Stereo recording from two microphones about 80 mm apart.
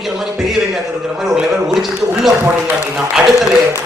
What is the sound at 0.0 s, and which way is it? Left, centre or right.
A man's voice, centre.